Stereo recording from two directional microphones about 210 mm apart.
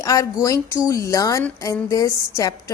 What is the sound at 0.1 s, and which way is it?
A woman's voice, 15° left (ahead or behind).